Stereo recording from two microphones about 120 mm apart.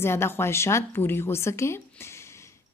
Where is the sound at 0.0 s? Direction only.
20° left (ahead or behind).